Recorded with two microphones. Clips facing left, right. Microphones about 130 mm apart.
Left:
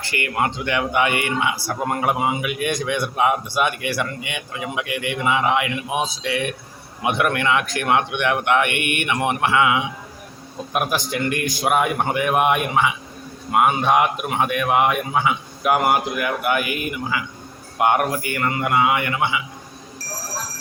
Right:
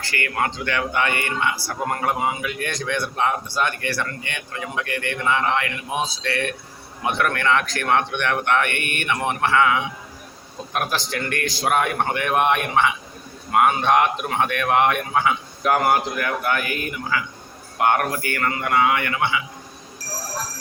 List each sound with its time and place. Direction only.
0.0 s speech: 20° left (ahead or behind)